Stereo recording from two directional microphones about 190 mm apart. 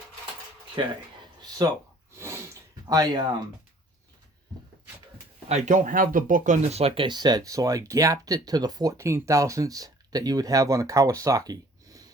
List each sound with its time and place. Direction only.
0.8 s speech: 25° right (ahead or behind)
1.4 s a sound: 20° right (ahead or behind)
2.1 s sneeze: 15° right (ahead or behind)
2.9 s speech: 20° right (ahead or behind)
5.5 s speech: 40° right (ahead or behind); by 12.1 s 20° right (ahead or behind)